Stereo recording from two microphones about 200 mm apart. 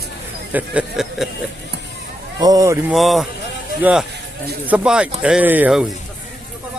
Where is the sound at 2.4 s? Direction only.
15° right (ahead or behind).